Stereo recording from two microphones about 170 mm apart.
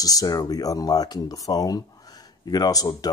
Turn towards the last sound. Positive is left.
turn(degrees=20)  # may be behind; listen again after turning